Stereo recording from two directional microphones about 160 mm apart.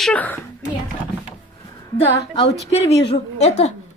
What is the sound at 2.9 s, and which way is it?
Speech, 90° left.